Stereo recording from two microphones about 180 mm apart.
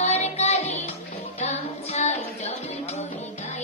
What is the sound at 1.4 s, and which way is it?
Child singing, 40° left (ahead or behind).